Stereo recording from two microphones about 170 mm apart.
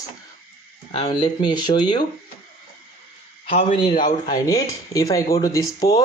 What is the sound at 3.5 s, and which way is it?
Speech, 35° left (ahead or behind).